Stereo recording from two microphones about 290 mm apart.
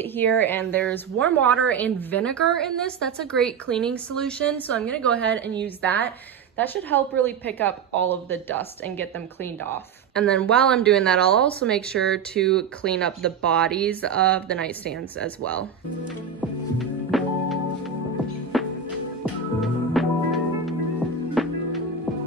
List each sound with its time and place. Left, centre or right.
0.0 s a woman's voice: centre
16.3 s music: centre